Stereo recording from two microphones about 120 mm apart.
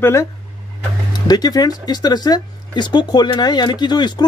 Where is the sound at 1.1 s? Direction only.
35° left (ahead or behind).